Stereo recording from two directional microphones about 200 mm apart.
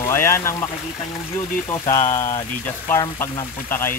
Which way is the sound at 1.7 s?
15° left (ahead or behind).